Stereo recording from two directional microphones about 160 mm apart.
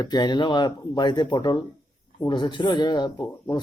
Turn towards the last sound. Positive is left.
turn(degrees=25)  # may be behind; listen again after turning